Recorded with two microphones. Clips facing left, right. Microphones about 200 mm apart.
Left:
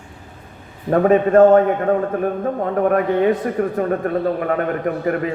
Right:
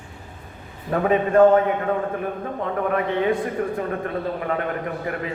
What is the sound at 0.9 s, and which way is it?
A man's voice, 45° left (ahead or behind).